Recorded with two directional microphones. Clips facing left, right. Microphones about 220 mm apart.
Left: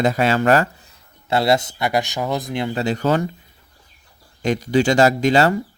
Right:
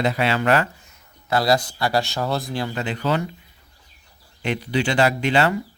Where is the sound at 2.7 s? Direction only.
35° left (ahead or behind).